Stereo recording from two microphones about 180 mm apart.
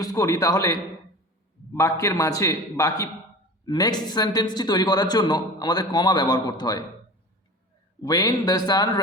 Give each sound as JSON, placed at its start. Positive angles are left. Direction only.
{"t": 0.0, "sound": "a man's voice", "side_deg": 20}
{"t": 8.0, "sound": "a man's voice", "side_deg": 20}